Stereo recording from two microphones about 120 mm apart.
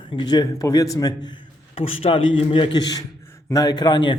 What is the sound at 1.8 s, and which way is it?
A man's voice, 50° left (ahead or behind).